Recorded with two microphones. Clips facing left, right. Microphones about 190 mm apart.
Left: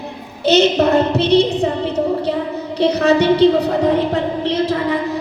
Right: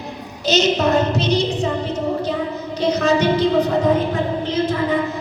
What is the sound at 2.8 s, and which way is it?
Speech, 65° left (ahead or behind).